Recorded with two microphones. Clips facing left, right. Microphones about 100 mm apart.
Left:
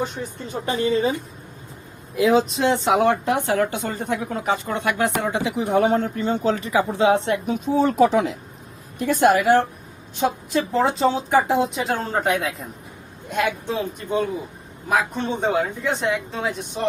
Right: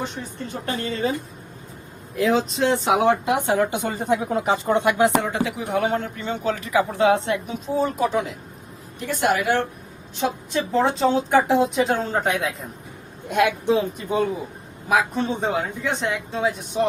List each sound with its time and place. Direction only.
0.4 s a woman's voice: 15° left (ahead or behind)
2.1 s a woman's voice: 5° left (ahead or behind)
3.4 s speech: 20° right (ahead or behind)
5.2 s a woman's voice: 15° left (ahead or behind)
5.7 s speech: 35° left (ahead or behind)
7.8 s speech: 90° left
9.0 s speech: 45° left (ahead or behind)
10.2 s a woman's voice: centre (ahead or behind)